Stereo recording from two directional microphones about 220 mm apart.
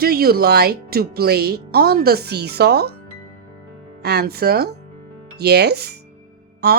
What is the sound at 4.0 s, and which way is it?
Speech, 45° right (ahead or behind).